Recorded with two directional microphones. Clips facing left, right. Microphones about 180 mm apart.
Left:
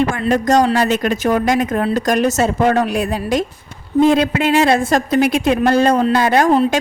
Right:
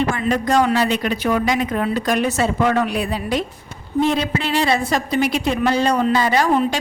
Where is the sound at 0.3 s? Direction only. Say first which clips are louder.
Left 4 dB; 40° left (ahead or behind).